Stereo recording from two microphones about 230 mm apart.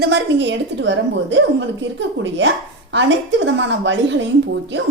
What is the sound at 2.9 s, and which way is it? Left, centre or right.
A woman's voice, right.